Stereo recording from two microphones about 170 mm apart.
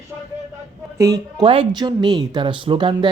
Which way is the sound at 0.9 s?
20° right (ahead or behind).